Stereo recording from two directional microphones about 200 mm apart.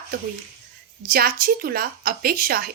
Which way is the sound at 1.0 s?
45° right (ahead or behind).